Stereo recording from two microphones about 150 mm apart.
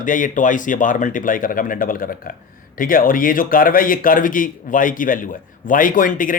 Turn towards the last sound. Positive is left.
turn(degrees=65)  # may be behind; listen again after turning